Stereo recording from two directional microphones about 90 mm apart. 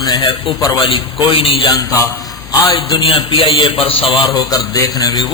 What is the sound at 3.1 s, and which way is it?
A man's voice, 75° left (ahead or behind).